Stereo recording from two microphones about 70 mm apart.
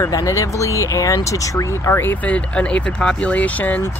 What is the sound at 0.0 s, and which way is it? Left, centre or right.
Speech, left.